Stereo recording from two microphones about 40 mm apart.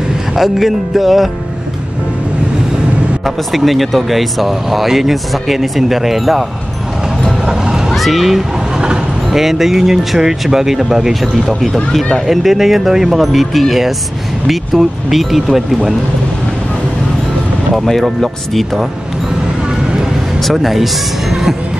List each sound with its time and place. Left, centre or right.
0.4 s speech: centre
3.3 s speech: centre
7.4 s music: centre
7.9 s a sound: centre
9.3 s speech: centre
11.7 s speech: centre
17.8 s speech: centre
20.5 s speech: centre